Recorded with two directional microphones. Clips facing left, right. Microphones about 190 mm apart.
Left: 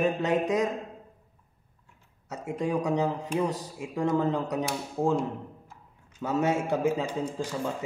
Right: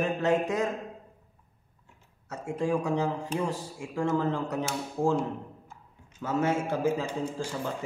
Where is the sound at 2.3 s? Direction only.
20° left (ahead or behind).